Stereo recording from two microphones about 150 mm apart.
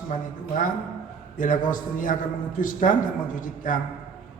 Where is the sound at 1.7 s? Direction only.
60° left (ahead or behind).